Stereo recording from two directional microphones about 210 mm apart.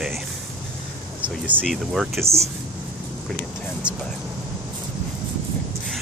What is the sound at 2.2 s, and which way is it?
Speech, 15° right (ahead or behind).